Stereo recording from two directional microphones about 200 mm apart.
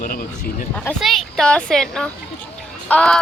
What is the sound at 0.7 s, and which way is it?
Speech, 5° left (ahead or behind).